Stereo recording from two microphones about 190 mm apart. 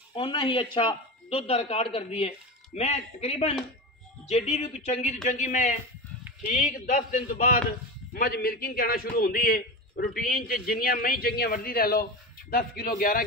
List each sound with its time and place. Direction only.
0.1 s a man's voice: 25° left (ahead or behind); by 13.2 s 50° left (ahead or behind)